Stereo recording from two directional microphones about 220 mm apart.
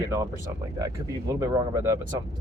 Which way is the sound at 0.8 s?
15° right (ahead or behind).